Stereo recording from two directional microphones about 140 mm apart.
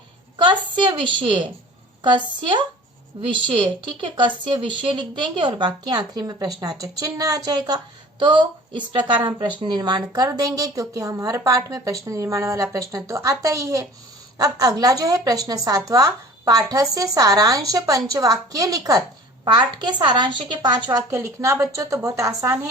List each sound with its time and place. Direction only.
0.3 s a woman's voice: 35° right (ahead or behind)